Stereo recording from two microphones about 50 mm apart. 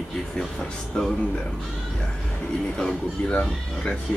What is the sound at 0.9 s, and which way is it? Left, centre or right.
Speech, centre.